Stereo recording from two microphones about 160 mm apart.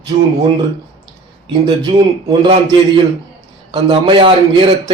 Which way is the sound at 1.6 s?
25° right (ahead or behind).